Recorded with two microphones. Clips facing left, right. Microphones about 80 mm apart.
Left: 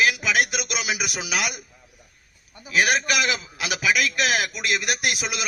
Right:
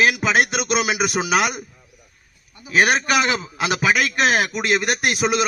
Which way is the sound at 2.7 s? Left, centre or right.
Right.